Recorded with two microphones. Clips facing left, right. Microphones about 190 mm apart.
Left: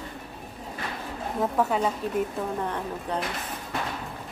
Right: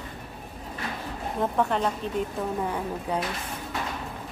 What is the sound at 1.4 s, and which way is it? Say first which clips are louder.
Speech: even; 5° left (ahead or behind).